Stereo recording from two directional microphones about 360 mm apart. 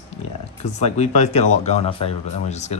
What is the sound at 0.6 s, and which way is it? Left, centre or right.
Speech, centre.